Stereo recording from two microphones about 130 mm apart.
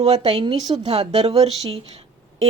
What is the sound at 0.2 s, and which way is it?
Speech, 35° right (ahead or behind).